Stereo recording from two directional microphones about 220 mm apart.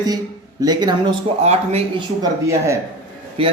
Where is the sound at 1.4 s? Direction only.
30° right (ahead or behind).